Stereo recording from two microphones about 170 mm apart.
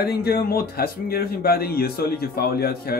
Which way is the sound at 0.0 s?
65° left (ahead or behind).